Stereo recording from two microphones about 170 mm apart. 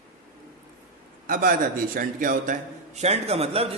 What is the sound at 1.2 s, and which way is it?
A man's voice, 55° right (ahead or behind).